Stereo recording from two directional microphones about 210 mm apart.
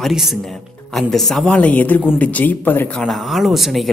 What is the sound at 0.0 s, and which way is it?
Speech, centre (ahead or behind).